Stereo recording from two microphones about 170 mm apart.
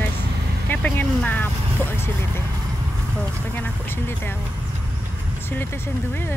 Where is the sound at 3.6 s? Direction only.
15° left (ahead or behind).